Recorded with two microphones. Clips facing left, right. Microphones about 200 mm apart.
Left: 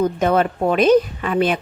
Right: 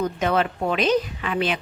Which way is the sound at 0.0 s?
50° left (ahead or behind).